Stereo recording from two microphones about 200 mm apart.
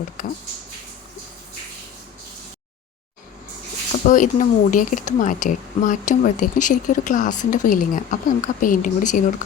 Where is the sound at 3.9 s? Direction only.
40° left (ahead or behind).